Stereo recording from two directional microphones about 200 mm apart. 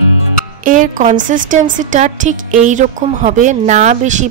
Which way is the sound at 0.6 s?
40° right (ahead or behind).